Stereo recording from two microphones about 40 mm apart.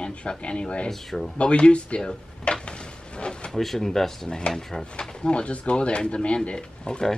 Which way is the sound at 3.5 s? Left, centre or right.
Centre.